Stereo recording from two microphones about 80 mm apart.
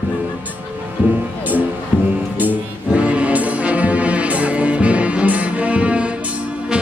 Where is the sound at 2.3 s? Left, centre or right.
Centre.